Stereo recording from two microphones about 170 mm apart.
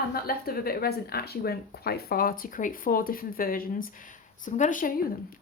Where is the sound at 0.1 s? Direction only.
65° left (ahead or behind).